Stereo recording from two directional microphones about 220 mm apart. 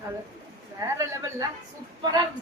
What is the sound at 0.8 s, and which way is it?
Speech, 15° right (ahead or behind).